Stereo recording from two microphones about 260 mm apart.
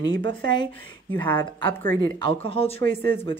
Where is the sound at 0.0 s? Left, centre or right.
Right.